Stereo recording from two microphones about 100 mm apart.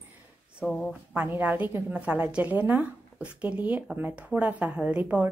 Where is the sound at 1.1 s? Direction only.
15° right (ahead or behind).